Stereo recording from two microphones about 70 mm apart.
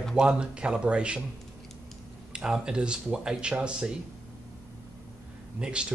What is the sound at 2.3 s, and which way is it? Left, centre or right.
Speech, centre.